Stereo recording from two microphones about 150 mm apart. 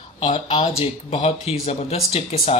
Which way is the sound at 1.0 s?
40° left (ahead or behind).